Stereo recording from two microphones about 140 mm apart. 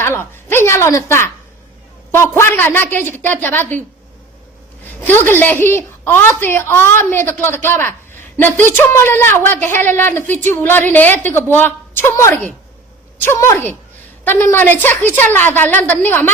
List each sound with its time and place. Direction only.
0.0 s a woman's voice: 15° left (ahead or behind)
5.0 s a woman's voice: 15° left (ahead or behind)